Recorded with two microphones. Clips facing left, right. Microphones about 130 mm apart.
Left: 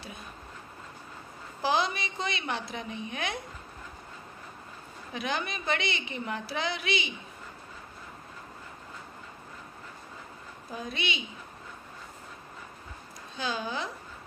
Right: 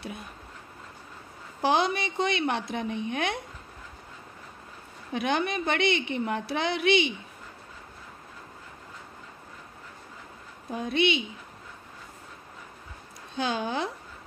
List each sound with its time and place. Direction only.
1.6 s a woman's voice: 60° right (ahead or behind)
5.1 s a woman's voice: 60° right (ahead or behind)
10.7 s a woman's voice: 60° right (ahead or behind)
13.4 s a woman's voice: 60° right (ahead or behind)